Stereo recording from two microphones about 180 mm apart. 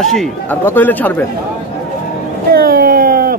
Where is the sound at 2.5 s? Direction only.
55° right (ahead or behind).